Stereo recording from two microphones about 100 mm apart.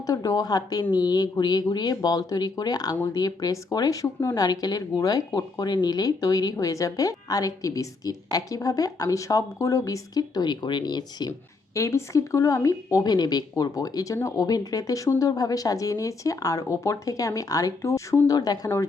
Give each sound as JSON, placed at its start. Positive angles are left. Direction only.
{"t": 0.0, "sound": "speech", "side_deg": 35}
{"t": 11.7, "sound": "speech", "side_deg": 30}